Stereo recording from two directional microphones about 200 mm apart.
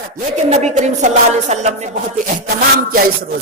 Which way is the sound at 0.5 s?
35° right (ahead or behind).